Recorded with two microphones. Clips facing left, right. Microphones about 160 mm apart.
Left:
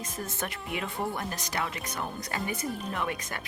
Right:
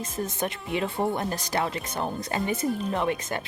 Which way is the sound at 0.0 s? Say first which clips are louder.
Right 6 dB; 20° right (ahead or behind).